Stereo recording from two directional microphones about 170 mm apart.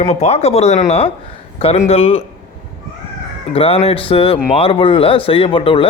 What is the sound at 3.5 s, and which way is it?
Speech, 35° left (ahead or behind).